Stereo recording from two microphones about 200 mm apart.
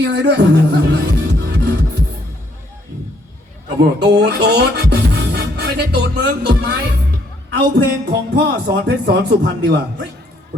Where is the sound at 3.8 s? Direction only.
55° right (ahead or behind).